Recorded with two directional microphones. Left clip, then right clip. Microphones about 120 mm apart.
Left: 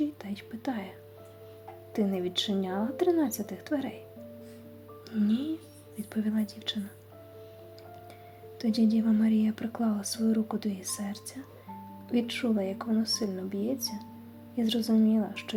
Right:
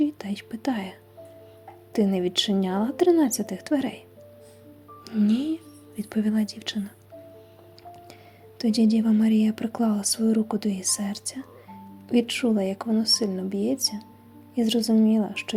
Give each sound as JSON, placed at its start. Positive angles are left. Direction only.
{"t": 0.0, "sound": "speech", "side_deg": -35}
{"t": 5.0, "sound": "speech", "side_deg": -35}
{"t": 8.5, "sound": "speech", "side_deg": -30}